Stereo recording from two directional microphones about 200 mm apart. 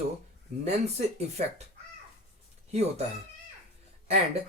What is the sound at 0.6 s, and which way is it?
Speech, 30° right (ahead or behind).